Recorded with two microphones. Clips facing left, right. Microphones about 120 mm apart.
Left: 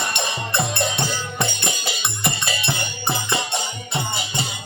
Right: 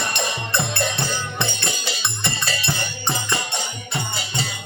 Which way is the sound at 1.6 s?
10° left (ahead or behind).